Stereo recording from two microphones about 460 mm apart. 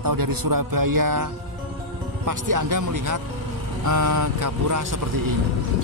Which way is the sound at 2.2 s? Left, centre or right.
Right.